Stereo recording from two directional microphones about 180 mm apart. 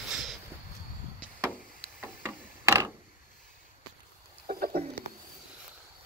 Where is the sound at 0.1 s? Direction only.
Centre (ahead or behind).